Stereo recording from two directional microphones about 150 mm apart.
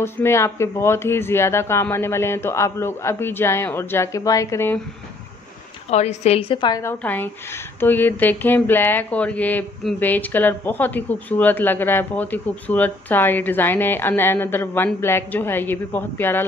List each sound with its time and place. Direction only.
0.0 s speech: 15° left (ahead or behind)
5.9 s a woman's voice: 45° left (ahead or behind)
6.8 s speech: 15° left (ahead or behind)